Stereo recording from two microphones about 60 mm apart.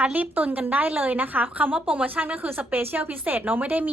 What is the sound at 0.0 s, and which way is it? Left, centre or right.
A woman's voice, right.